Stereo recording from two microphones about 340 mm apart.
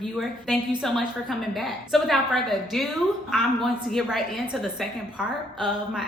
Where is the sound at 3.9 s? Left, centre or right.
Centre.